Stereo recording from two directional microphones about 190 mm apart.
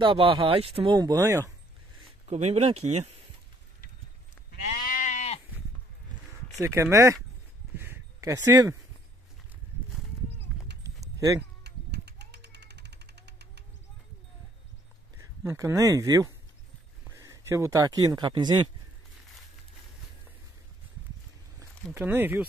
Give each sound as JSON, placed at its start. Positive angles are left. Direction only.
{"t": 0.0, "sound": "speech", "side_deg": -25}
{"t": 2.2, "sound": "speech", "side_deg": -35}
{"t": 4.5, "sound": "goat", "side_deg": 45}
{"t": 6.6, "sound": "speech", "side_deg": -15}
{"t": 7.7, "sound": "a sound", "side_deg": -10}
{"t": 10.8, "sound": "a sound", "side_deg": -15}
{"t": 11.6, "sound": "a sound", "side_deg": -60}
{"t": 15.1, "sound": "speech", "side_deg": -15}
{"t": 21.9, "sound": "speech", "side_deg": -10}